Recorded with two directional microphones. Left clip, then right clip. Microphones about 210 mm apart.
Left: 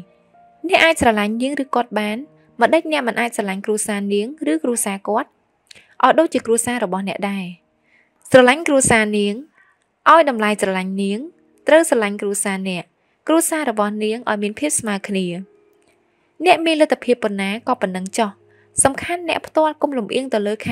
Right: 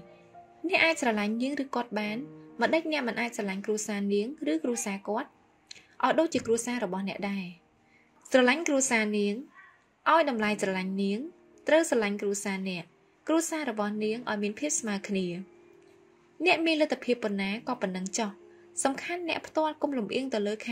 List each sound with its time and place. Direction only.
0.7 s a woman's voice: 50° left (ahead or behind)